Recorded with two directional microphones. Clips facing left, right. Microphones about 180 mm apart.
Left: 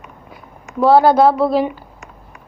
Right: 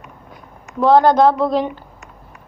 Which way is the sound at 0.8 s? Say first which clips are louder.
Left 1 dB; 5° left (ahead or behind).